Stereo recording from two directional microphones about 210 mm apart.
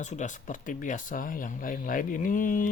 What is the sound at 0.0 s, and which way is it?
Speech, 35° left (ahead or behind).